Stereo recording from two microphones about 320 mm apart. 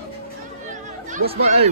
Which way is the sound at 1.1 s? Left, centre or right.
Right.